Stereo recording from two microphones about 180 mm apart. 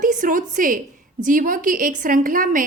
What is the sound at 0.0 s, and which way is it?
A woman's voice, 45° right (ahead or behind).